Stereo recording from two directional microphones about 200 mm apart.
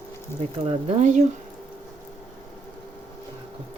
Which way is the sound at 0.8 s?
40° right (ahead or behind).